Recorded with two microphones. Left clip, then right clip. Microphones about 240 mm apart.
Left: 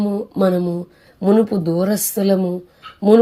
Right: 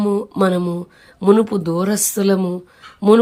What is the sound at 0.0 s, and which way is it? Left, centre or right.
Speech, centre.